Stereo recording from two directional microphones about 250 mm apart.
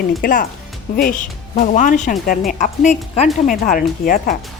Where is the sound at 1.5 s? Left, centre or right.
Left.